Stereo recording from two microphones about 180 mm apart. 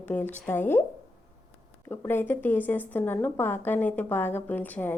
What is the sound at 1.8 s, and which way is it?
Speech, 10° left (ahead or behind).